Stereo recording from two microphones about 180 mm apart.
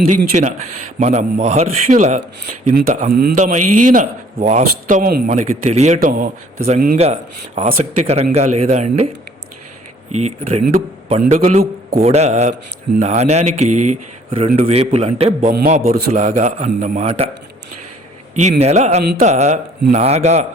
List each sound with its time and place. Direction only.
0.4 s speech: 40° right (ahead or behind)
10.1 s speech: 35° right (ahead or behind); by 12.0 s 55° right (ahead or behind)
12.0 s speech: 35° right (ahead or behind)
15.4 s speech: 50° right (ahead or behind)
18.3 s speech: 40° right (ahead or behind)